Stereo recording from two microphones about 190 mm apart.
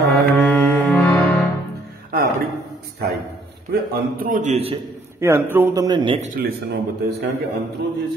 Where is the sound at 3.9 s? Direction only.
45° right (ahead or behind).